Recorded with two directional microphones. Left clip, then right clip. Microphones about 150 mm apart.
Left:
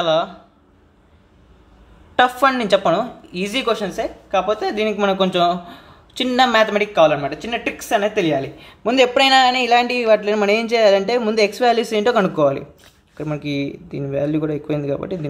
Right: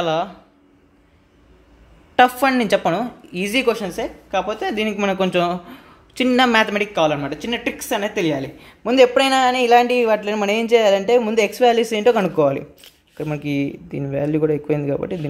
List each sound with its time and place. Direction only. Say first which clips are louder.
0.0 s speech: left 3 dB; 25° right (ahead or behind)
2.1 s speech: even; 25° right (ahead or behind)